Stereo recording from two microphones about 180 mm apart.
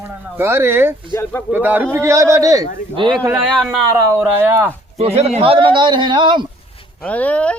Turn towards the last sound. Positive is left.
turn(degrees=5)  # may be behind; listen again after turning